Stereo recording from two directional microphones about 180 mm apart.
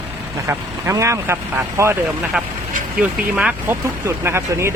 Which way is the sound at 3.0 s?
5° right (ahead or behind).